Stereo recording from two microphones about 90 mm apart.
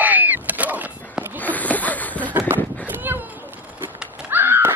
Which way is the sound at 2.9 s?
20° right (ahead or behind).